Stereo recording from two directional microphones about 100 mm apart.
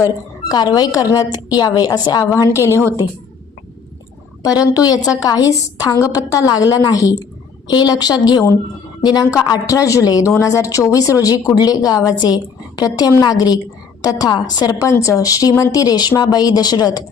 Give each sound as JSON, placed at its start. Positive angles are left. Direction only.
{"t": 0.0, "sound": "a woman's voice", "side_deg": 40}
{"t": 2.3, "sound": "a woman's voice", "side_deg": 30}
{"t": 2.8, "sound": "a woman's voice", "side_deg": -25}
{"t": 4.6, "sound": "a woman's voice", "side_deg": 40}